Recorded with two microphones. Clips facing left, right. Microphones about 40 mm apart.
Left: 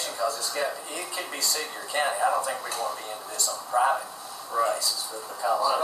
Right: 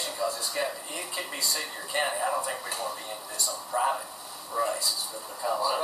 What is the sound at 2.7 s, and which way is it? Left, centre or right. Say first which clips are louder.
Speech: left 3 dB; right.